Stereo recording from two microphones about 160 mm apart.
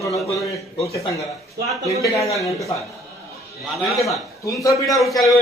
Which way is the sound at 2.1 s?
20° left (ahead or behind).